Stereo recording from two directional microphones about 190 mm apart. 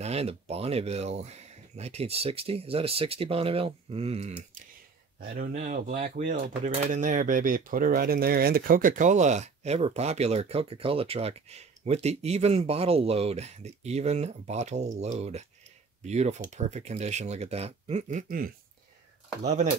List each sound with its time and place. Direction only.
0.0 s speech: 35° right (ahead or behind)
5.2 s speech: 50° right (ahead or behind)
5.5 s speech: 40° right (ahead or behind)